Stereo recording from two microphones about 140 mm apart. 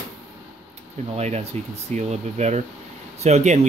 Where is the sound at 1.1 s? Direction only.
50° right (ahead or behind).